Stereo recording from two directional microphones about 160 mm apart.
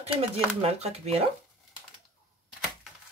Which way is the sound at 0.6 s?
40° right (ahead or behind).